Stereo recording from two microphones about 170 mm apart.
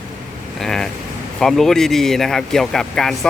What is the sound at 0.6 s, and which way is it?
Speech, centre (ahead or behind).